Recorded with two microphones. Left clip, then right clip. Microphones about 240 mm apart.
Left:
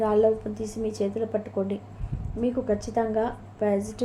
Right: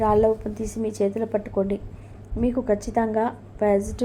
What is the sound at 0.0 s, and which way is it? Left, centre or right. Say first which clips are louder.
A woman's voice: right 2 dB; right.